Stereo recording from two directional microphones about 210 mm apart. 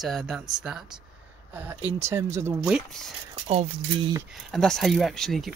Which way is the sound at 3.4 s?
30° right (ahead or behind).